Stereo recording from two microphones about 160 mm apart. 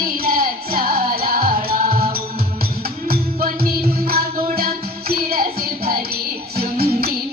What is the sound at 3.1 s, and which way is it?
Music, 70° right (ahead or behind).